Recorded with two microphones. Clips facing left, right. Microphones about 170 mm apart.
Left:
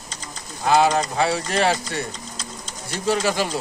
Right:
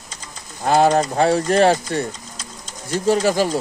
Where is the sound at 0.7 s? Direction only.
50° right (ahead or behind).